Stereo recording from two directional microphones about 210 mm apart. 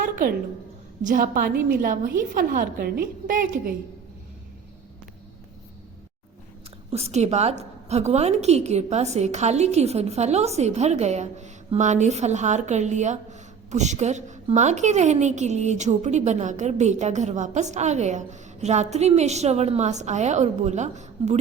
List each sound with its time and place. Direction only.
0.0 s a sound: 40° right (ahead or behind)
1.0 s a woman's voice: 40° right (ahead or behind)
6.9 s a woman's voice: 30° right (ahead or behind)